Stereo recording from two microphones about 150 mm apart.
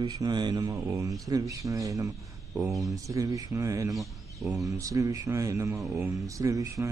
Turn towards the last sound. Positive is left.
turn(degrees=-20)  # may be behind; listen again after turning